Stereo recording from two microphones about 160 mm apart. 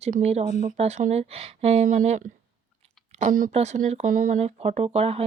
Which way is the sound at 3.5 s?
45° right (ahead or behind).